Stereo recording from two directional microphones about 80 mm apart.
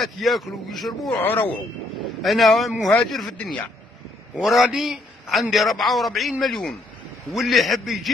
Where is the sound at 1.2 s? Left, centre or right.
Left.